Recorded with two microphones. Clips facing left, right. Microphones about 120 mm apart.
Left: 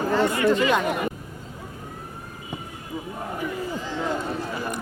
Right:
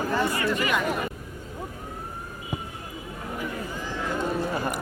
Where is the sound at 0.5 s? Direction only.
30° left (ahead or behind).